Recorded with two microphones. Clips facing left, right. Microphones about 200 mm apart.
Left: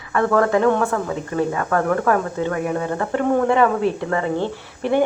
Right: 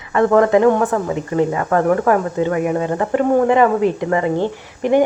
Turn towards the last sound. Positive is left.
turn(degrees=-15)  # may be behind; listen again after turning